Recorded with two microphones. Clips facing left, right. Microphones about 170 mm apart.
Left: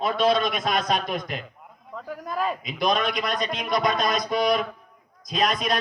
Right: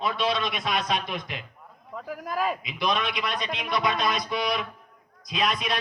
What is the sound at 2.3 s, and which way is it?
Speech, 5° right (ahead or behind).